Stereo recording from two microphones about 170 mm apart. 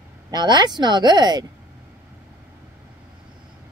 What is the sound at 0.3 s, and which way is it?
Speech, 25° right (ahead or behind).